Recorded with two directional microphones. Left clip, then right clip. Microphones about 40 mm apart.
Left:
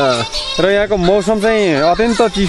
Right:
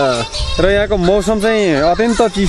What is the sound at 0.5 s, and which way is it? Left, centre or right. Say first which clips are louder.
Speech: even; right.